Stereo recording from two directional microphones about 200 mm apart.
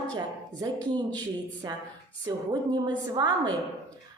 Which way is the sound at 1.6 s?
20° right (ahead or behind).